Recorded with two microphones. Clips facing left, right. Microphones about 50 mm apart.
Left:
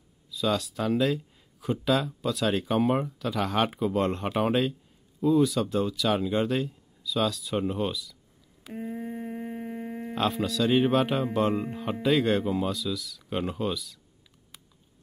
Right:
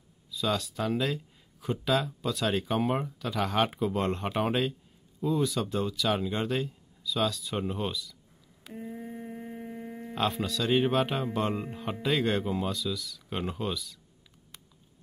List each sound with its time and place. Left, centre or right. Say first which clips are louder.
0.3 s speech: left 3 dB; centre
8.7 s humming: left 5 dB; left
10.1 s speech: left 2 dB; centre
14.5 s typing: even; centre